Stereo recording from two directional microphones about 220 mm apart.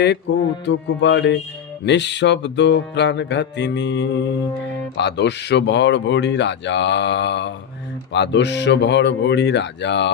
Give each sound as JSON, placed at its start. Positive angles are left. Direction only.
{"t": 0.3, "sound": "speech", "side_deg": 55}